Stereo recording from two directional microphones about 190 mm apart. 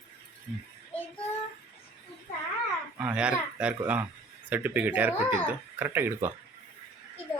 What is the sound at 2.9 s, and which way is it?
Speech, 5° right (ahead or behind).